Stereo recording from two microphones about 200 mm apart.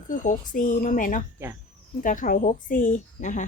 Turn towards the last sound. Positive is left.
turn(degrees=40)  # may be behind; listen again after turning